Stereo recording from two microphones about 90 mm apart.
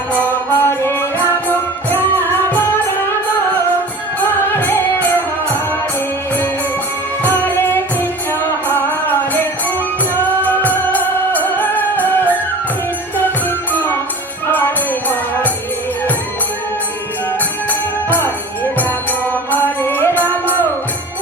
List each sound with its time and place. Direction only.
0.2 s music: 25° left (ahead or behind)
4.2 s music: 25° left (ahead or behind)
7.2 s music: 20° left (ahead or behind)
14.4 s music: 25° left (ahead or behind)
17.7 s music: 20° left (ahead or behind)